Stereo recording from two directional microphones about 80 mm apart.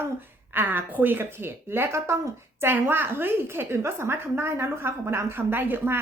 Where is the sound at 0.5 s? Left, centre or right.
Right.